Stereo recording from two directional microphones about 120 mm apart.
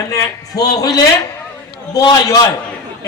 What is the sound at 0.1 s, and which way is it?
A man's voice, 30° left (ahead or behind).